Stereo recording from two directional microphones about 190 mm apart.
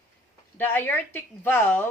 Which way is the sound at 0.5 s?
10° left (ahead or behind).